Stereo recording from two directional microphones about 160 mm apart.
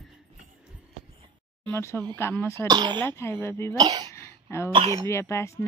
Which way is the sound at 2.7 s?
25° right (ahead or behind).